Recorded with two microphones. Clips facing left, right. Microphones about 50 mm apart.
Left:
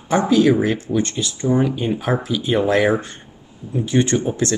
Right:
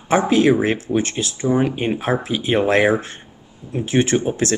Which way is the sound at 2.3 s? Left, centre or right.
Right.